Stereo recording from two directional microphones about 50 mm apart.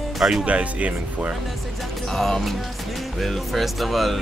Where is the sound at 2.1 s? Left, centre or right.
Centre.